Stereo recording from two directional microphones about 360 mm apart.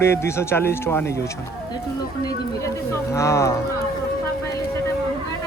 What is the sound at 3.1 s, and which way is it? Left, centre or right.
Speech, centre.